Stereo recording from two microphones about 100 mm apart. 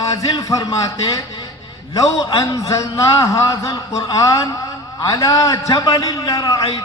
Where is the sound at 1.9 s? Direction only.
35° left (ahead or behind).